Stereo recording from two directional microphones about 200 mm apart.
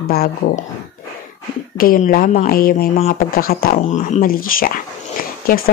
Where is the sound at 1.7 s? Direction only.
45° left (ahead or behind).